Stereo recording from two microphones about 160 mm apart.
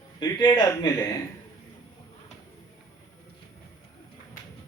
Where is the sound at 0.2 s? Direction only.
25° left (ahead or behind).